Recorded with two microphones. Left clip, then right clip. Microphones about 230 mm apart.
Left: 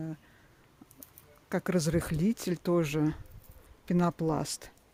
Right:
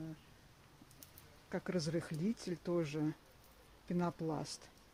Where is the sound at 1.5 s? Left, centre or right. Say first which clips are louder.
Left 9 dB; left.